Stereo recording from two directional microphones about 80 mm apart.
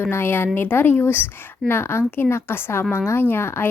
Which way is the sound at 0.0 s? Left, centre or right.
Left.